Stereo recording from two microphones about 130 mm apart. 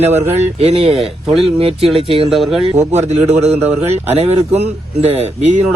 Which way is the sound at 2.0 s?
45° right (ahead or behind).